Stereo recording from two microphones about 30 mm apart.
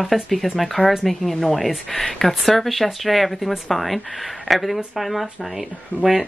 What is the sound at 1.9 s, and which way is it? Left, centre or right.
Speech, centre.